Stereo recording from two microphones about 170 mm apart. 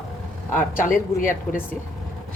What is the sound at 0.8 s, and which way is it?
Speech, 55° left (ahead or behind).